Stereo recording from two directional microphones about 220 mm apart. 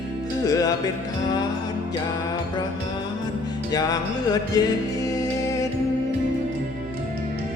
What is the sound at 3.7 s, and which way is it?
Music, 15° left (ahead or behind).